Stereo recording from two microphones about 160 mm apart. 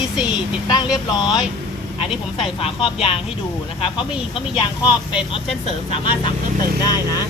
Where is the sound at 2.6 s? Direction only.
35° left (ahead or behind).